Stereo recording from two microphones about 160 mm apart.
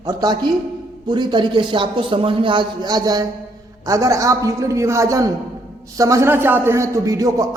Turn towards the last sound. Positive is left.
turn(degrees=-20)  # may be behind; listen again after turning